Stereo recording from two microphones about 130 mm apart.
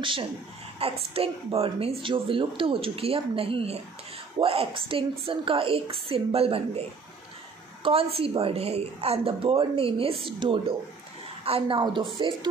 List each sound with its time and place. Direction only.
0.0 s a woman's voice: 40° right (ahead or behind)